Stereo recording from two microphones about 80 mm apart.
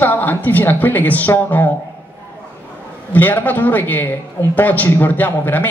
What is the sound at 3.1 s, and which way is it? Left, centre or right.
Speech, left.